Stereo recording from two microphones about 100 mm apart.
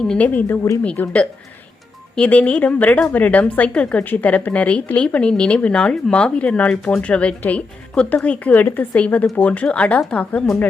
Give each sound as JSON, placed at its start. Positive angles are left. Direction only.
{"t": 0.0, "sound": "speech", "side_deg": 10}
{"t": 0.8, "sound": "speech", "side_deg": 15}
{"t": 2.1, "sound": "speech", "side_deg": 15}